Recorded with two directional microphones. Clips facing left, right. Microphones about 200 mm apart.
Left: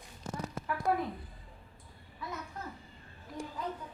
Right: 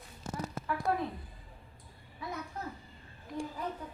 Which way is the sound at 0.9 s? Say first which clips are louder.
Left 2 dB; 10° left (ahead or behind).